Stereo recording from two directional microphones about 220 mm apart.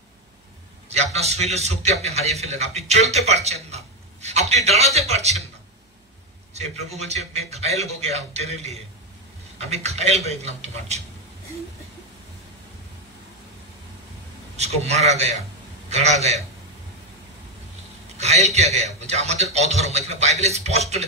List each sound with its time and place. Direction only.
0.8 s a man's voice: 30° right (ahead or behind)
6.5 s a man's voice: 30° right (ahead or behind)
14.6 s a man's voice: 30° right (ahead or behind)
18.1 s a man's voice: 30° right (ahead or behind)